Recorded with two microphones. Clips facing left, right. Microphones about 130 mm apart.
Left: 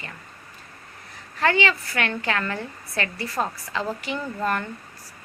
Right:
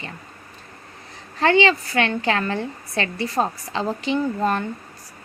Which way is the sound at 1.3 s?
25° right (ahead or behind).